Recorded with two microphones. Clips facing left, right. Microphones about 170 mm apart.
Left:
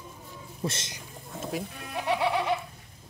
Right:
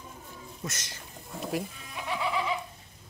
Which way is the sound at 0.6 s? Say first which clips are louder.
Left 7 dB; 25° left (ahead or behind).